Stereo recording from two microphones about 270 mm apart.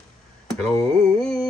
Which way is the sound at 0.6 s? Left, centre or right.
Centre.